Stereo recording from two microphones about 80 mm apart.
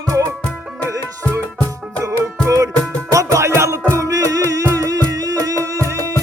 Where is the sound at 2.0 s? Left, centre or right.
Right.